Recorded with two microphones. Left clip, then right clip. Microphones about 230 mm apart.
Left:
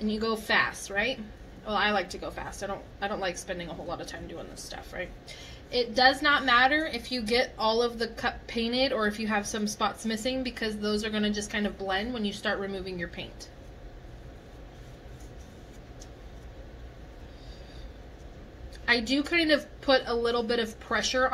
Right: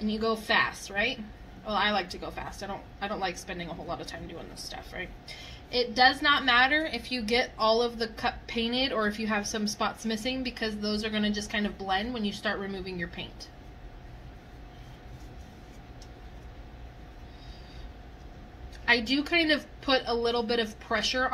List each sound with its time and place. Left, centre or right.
0.0 s a woman's voice: right
19.0 s a woman's voice: right